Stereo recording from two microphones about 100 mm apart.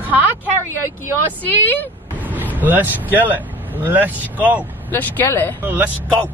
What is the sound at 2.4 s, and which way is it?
Speech, 20° right (ahead or behind).